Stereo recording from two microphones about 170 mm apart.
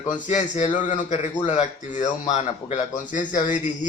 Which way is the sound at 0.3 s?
45° left (ahead or behind).